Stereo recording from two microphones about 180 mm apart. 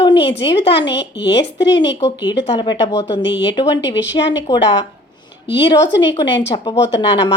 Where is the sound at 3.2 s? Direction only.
85° left.